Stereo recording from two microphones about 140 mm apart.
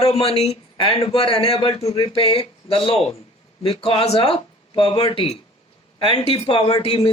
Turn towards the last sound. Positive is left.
turn(degrees=45)  # may be behind; listen again after turning